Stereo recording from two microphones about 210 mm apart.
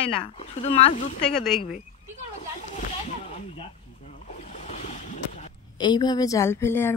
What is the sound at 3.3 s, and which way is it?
Ocean, 30° left (ahead or behind).